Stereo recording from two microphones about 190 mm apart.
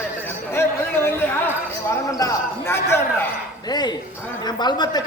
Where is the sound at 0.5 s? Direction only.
10° left (ahead or behind).